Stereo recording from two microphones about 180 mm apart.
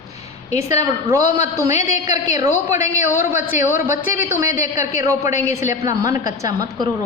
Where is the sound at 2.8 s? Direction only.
40° left (ahead or behind).